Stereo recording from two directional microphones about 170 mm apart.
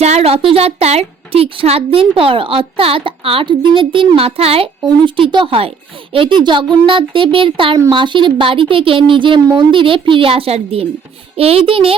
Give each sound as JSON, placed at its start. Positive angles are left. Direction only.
{"t": 0.0, "sound": "a child's voice", "side_deg": -40}